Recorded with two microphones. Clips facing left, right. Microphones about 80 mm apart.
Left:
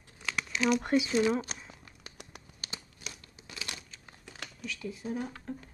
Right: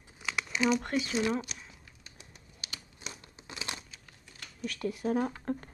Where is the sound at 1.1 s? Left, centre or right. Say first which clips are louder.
Left 1 dB; centre.